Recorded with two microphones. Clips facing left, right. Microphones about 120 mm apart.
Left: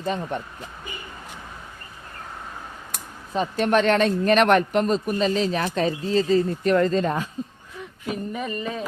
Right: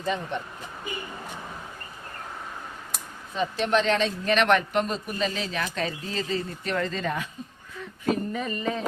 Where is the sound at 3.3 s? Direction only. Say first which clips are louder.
Left 3 dB; 45° left (ahead or behind).